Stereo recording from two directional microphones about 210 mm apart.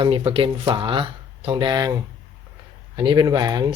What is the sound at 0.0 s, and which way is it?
Speech, 25° right (ahead or behind).